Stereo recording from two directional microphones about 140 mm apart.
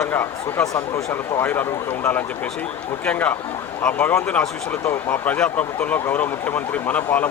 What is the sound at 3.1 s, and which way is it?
Speech, 10° left (ahead or behind).